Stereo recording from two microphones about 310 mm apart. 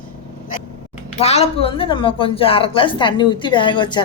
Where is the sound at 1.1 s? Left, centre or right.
Centre.